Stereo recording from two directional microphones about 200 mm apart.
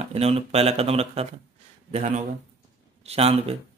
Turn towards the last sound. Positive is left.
turn(degrees=-30)  # may be behind; listen again after turning